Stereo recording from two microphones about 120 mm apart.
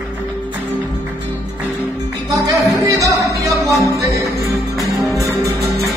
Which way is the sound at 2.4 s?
30° right (ahead or behind).